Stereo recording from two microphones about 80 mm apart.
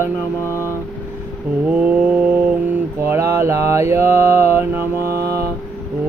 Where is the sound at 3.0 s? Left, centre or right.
Right.